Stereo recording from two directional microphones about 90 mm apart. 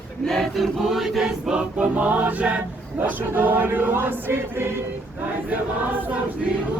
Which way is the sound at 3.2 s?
20° right (ahead or behind).